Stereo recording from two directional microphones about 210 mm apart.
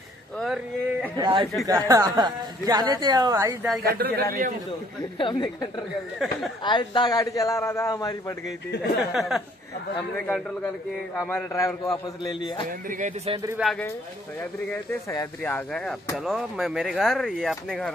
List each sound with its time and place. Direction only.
1.1 s speech: 20° right (ahead or behind)
3.8 s a man's voice: 45° right (ahead or behind)
5.2 s a woman's voice: 20° left (ahead or behind)
9.0 s a man's voice: centre (ahead or behind); by 12.6 s 20° left (ahead or behind)
12.9 s speech: 35° right (ahead or behind)
13.3 s speech: 15° right (ahead or behind)
13.6 s speech: centre (ahead or behind)
15.0 s a man's voice: 10° left (ahead or behind)